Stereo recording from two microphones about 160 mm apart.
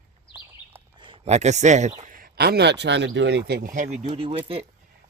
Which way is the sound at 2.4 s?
90° right.